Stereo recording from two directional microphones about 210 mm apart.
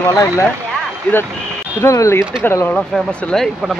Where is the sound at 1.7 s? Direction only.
15° left (ahead or behind).